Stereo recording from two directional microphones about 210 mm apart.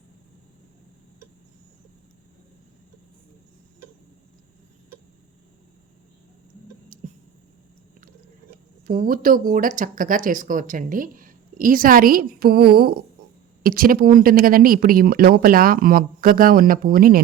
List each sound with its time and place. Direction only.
8.9 s speech: 40° right (ahead or behind)